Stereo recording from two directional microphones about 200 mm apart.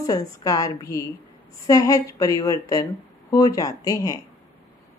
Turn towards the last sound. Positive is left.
turn(degrees=20)  # may be behind; listen again after turning